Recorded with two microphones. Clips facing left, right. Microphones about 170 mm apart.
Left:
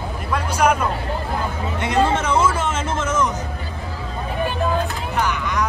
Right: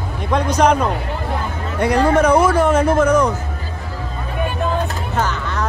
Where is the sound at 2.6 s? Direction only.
25° left (ahead or behind).